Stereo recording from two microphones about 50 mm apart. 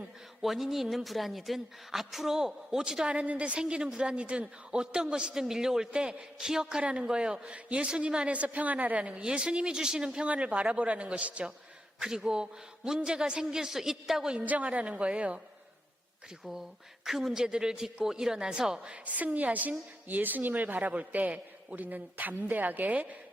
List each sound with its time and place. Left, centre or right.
0.4 s a woman's voice: centre; by 11.5 s right
11.9 s a woman's voice: centre
14.3 s a woman's voice: right
16.4 s a woman's voice: centre
19.0 s a man's voice: right